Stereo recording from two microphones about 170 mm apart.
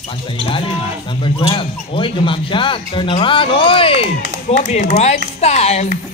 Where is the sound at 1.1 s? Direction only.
30° left (ahead or behind).